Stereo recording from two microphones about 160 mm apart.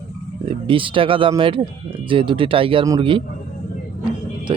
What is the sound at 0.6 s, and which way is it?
Speech, 35° right (ahead or behind).